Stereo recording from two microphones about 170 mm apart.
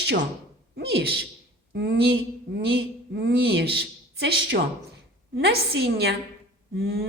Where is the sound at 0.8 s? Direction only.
70° right (ahead or behind).